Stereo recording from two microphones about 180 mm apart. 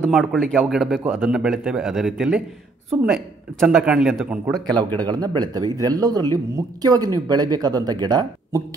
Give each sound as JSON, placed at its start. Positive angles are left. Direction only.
{"t": 0.0, "sound": "a man's voice", "side_deg": 0}
{"t": 4.6, "sound": "speech", "side_deg": -25}